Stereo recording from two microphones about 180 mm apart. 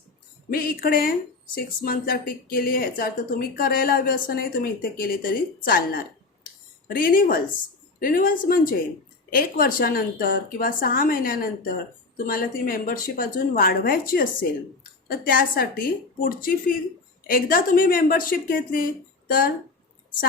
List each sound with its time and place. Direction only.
0.5 s speech: 55° left (ahead or behind)
6.4 s a sound: 50° left (ahead or behind)
7.9 s speech: 50° left (ahead or behind)